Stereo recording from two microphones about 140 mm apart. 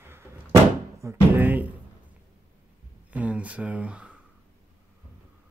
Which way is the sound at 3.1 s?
10° right (ahead or behind).